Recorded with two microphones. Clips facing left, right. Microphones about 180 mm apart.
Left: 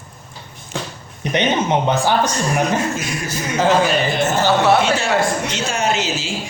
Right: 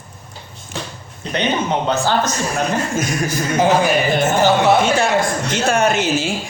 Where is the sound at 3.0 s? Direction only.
45° right (ahead or behind).